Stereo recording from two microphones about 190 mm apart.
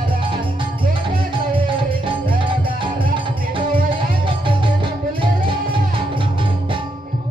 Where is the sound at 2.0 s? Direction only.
25° right (ahead or behind).